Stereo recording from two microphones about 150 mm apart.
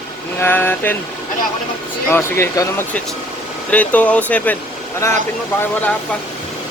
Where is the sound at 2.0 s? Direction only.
15° left (ahead or behind).